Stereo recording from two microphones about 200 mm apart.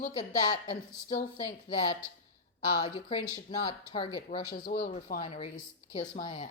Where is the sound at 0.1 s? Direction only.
25° left (ahead or behind).